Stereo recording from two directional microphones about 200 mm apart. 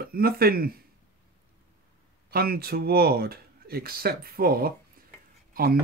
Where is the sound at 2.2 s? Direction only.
50° right (ahead or behind).